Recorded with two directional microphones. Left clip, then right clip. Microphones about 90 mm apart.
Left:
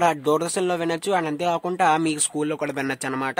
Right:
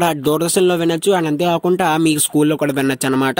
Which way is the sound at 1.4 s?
55° right (ahead or behind).